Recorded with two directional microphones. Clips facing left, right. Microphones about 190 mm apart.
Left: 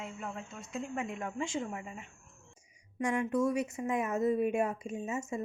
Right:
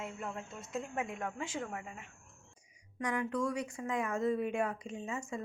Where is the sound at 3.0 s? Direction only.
25° left (ahead or behind).